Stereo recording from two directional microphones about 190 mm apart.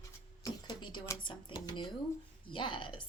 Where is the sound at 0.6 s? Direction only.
25° left (ahead or behind).